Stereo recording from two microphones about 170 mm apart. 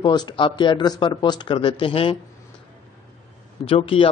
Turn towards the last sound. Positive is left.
turn(degrees=30)  # may be behind; listen again after turning